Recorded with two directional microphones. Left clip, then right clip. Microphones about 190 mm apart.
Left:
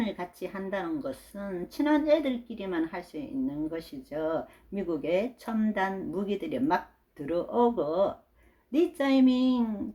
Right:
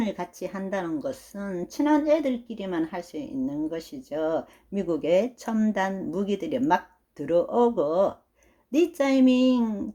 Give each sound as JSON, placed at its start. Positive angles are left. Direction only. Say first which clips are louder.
{"t": 0.0, "sound": "speech", "louder": "right 3 dB", "side_deg": -40}